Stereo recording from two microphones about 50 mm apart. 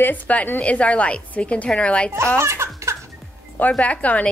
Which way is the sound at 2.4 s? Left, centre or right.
Right.